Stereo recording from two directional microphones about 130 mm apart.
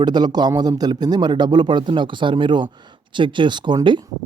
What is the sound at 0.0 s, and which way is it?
A man's voice, 35° right (ahead or behind).